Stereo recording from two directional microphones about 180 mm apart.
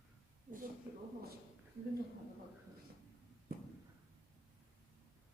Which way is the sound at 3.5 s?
55° right (ahead or behind).